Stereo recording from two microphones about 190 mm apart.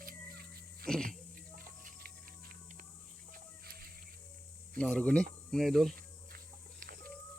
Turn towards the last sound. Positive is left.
turn(degrees=-50)  # may be behind; listen again after turning